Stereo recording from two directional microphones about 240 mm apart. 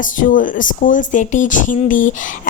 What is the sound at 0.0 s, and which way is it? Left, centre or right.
A woman's voice, left.